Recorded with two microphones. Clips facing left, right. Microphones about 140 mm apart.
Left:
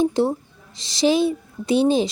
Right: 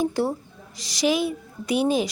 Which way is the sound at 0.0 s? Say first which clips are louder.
Left 4 dB; 20° left (ahead or behind).